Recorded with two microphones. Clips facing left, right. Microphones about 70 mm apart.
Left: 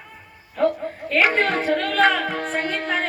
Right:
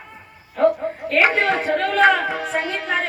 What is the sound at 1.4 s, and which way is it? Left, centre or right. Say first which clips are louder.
Speech: right 1 dB; centre.